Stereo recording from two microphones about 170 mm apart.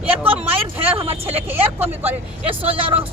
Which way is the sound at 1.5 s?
10° right (ahead or behind).